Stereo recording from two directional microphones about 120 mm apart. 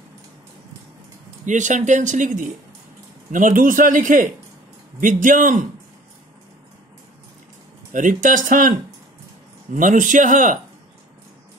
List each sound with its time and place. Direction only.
1.4 s speech: 90° right
7.9 s speech: 90° right
9.7 s speech: 90° right